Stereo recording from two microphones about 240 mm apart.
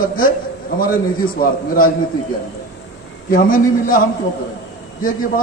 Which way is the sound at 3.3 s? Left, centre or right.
Left.